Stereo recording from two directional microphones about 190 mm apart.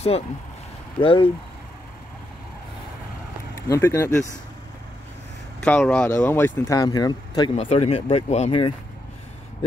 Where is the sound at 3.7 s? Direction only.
15° left (ahead or behind).